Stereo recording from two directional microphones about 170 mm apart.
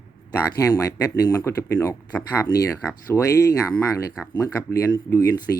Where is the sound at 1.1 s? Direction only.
20° left (ahead or behind).